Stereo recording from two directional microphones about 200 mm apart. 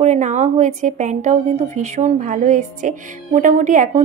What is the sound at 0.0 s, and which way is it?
A woman's voice, 35° right (ahead or behind).